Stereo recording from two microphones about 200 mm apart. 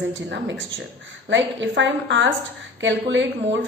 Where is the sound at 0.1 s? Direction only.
65° right (ahead or behind).